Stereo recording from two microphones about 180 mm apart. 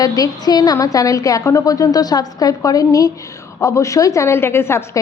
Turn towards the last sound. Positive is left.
turn(degrees=15)  # may be behind; listen again after turning